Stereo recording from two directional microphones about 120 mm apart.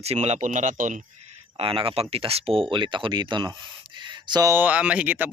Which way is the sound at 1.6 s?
45° right (ahead or behind).